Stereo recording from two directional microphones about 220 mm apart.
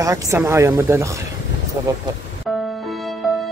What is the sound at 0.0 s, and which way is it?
Speech, 15° right (ahead or behind).